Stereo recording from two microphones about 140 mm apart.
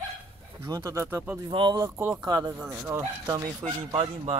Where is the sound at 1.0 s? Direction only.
15° right (ahead or behind).